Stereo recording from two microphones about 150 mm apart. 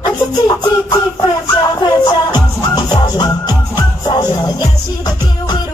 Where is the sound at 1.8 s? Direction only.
30° left (ahead or behind).